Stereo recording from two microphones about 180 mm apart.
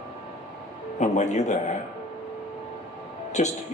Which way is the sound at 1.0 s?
40° left (ahead or behind).